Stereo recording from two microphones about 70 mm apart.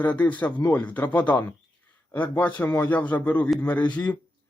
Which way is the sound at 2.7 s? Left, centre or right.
Left.